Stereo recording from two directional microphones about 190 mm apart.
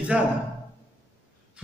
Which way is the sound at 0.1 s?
5° right (ahead or behind).